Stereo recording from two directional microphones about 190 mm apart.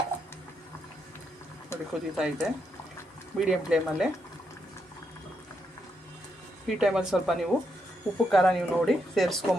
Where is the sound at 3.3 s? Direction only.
5° right (ahead or behind).